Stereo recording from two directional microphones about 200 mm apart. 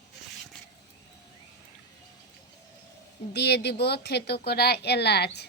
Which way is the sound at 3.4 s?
55° left (ahead or behind).